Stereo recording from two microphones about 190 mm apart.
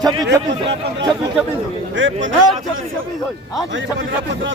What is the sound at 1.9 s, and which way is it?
Speech, 80° right.